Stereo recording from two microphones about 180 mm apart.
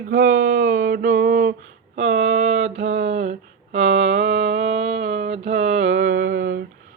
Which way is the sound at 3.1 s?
40° right (ahead or behind).